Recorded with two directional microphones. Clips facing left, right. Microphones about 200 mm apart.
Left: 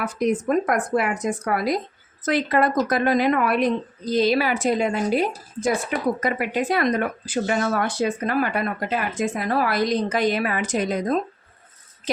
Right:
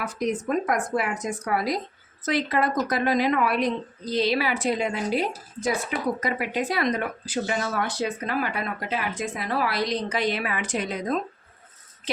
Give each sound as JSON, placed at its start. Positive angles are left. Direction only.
{"t": 0.0, "sound": "speech", "side_deg": 55}